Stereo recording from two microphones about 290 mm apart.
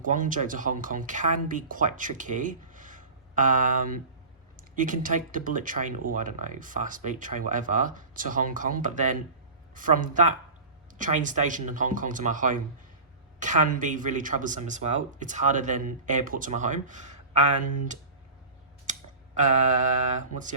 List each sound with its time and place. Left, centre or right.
0.0 s speech: right